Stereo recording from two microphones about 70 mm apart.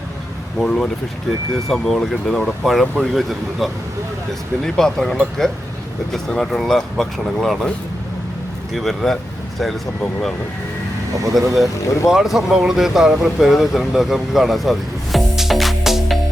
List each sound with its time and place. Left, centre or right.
0.6 s speech: centre
8.7 s speech: centre
11.1 s speech: right
11.5 s speech: centre